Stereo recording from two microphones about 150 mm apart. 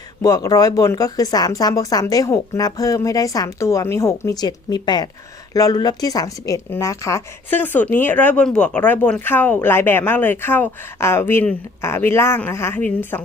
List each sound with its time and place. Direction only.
0.2 s a woman's voice: 25° left (ahead or behind)